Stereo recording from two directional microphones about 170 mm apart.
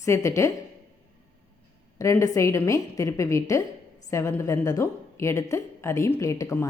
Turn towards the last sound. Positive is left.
turn(degrees=15)  # may be behind; listen again after turning